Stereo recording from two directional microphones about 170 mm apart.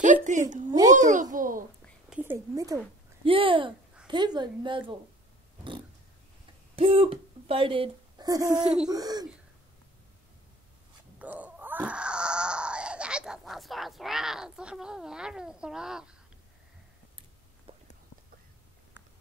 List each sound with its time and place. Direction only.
0.0 s a woman's voice: 45° right (ahead or behind)
2.0 s speech: 10° right (ahead or behind)
3.3 s a woman's voice: 30° right (ahead or behind)
6.7 s a woman's voice: 35° right (ahead or behind)
11.1 s wail: 10° right (ahead or behind)
17.7 s a sound: 35° right (ahead or behind)